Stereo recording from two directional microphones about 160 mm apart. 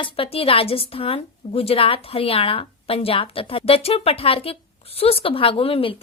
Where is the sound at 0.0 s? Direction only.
35° left (ahead or behind).